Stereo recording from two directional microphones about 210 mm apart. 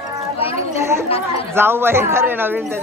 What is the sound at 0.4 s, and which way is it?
Children playing, 25° left (ahead or behind).